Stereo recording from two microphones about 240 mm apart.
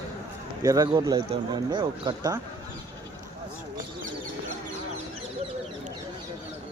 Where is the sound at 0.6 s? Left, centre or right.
Centre.